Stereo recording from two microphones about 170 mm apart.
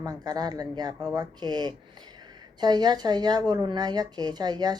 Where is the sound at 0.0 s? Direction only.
25° right (ahead or behind).